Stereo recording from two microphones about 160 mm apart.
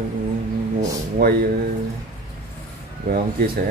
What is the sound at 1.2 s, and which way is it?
Speech, 80° right.